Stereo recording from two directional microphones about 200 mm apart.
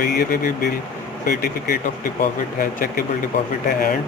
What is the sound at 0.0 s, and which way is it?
Speech, 45° left (ahead or behind).